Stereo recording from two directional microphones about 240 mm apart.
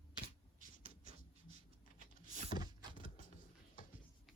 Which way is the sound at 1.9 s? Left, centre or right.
Left.